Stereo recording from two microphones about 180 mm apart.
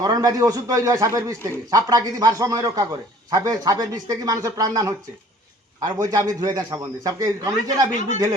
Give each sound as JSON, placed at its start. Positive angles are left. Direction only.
{"t": 0.0, "sound": "a man's voice", "side_deg": -20}